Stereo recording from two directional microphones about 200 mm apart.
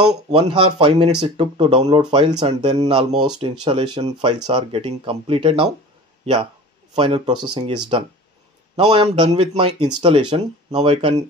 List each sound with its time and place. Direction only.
0.3 s speech: 25° right (ahead or behind)
7.0 s speech: 25° right (ahead or behind)